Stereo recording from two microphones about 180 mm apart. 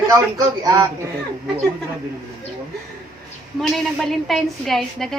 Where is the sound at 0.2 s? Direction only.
20° right (ahead or behind).